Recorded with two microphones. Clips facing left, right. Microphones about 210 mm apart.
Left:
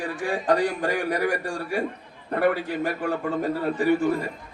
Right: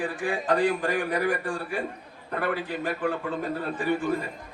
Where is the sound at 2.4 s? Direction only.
45° left (ahead or behind).